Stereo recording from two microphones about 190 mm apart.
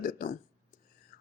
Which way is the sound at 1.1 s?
50° left (ahead or behind).